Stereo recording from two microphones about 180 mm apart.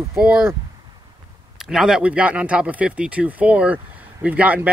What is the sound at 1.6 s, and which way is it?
Speech, centre (ahead or behind).